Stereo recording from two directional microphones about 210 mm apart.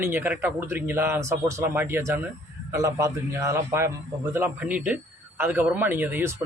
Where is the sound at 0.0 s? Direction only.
10° right (ahead or behind).